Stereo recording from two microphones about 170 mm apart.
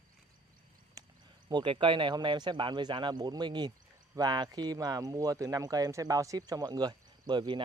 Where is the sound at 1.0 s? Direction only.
25° right (ahead or behind).